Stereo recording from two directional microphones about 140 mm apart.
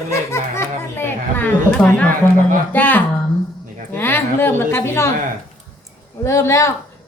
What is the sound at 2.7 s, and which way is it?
A woman's voice, 15° left (ahead or behind).